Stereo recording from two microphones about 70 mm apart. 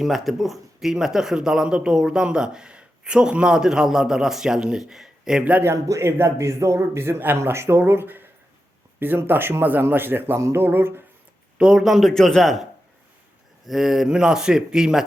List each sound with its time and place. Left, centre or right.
0.0 s speech: centre
5.6 s a man's voice: right
11.5 s speech: centre
13.7 s speech: centre